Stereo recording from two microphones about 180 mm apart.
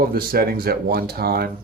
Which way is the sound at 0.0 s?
55° right (ahead or behind).